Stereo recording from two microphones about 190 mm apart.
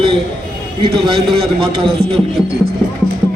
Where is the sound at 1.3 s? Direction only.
30° right (ahead or behind).